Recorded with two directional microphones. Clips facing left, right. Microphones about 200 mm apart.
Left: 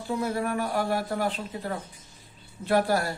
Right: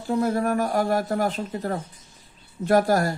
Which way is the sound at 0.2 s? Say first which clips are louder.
Right 7 dB; 45° right (ahead or behind).